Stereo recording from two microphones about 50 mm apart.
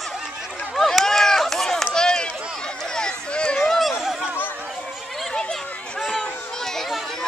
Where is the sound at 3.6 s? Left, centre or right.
Centre.